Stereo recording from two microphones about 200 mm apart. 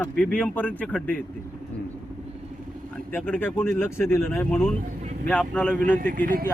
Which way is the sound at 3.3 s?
10° left (ahead or behind).